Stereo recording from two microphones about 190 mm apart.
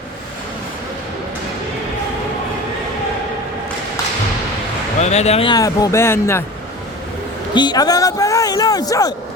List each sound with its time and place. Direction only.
4.9 s a man's voice: 35° left (ahead or behind); by 6.4 s 15° left (ahead or behind)
7.5 s a man's voice: 20° left (ahead or behind)